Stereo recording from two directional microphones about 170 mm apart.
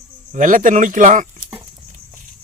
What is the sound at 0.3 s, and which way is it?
Speech, 50° right (ahead or behind).